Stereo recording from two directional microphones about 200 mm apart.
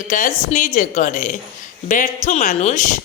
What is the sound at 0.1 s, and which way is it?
Speech, 40° left (ahead or behind).